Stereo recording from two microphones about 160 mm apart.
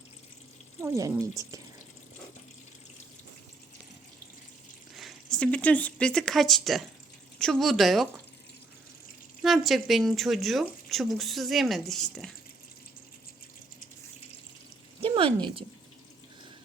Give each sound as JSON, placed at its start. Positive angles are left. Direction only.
{"t": 0.8, "sound": "speech", "side_deg": -20}
{"t": 4.9, "sound": "speech", "side_deg": 0}
{"t": 9.4, "sound": "speech", "side_deg": 0}
{"t": 15.0, "sound": "speech", "side_deg": -35}